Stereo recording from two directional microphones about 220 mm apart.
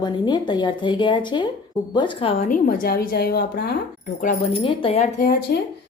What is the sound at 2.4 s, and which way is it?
A woman's voice, 40° left (ahead or behind).